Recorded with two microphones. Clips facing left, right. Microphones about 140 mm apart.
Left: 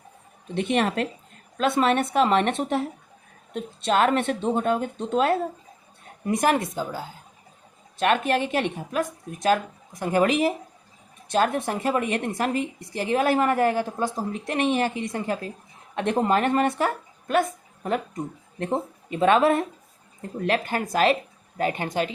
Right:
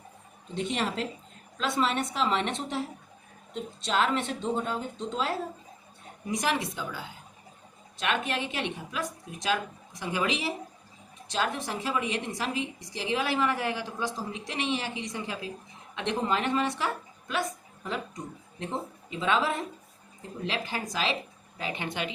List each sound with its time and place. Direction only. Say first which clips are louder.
0.5 s a woman's voice: left 7 dB; 65° left (ahead or behind); by 22.1 s 40° left (ahead or behind)